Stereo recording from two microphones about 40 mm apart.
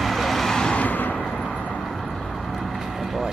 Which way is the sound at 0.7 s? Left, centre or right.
Left.